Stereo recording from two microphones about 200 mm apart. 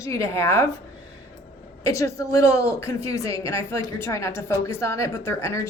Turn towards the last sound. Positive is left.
turn(degrees=15)  # may be behind; listen again after turning